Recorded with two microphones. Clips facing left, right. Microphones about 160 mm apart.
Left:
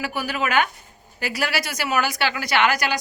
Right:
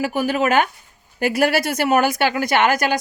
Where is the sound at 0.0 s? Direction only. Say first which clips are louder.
Right 6 dB; 45° right (ahead or behind).